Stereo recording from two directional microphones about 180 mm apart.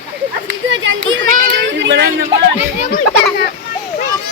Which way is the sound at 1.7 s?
85° right.